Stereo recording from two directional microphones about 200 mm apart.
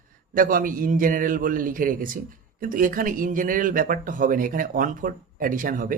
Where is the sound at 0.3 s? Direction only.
45° right (ahead or behind).